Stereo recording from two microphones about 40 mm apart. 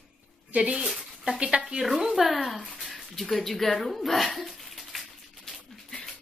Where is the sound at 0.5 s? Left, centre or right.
Right.